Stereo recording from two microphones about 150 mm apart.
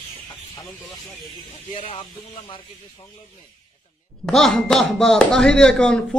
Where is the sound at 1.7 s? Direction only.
35° left (ahead or behind).